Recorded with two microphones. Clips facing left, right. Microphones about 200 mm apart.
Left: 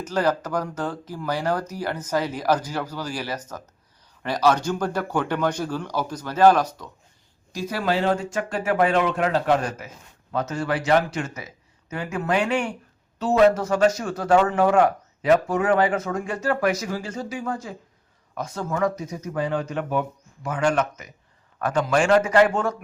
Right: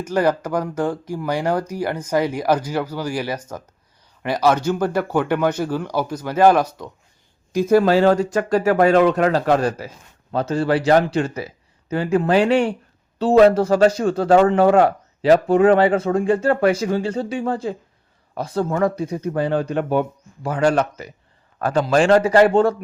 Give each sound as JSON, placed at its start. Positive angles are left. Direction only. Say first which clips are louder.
{"t": 0.0, "sound": "speech", "louder": "right 4 dB", "side_deg": -10}
{"t": 7.5, "sound": "a man's voice", "louder": "right 10 dB", "side_deg": -50}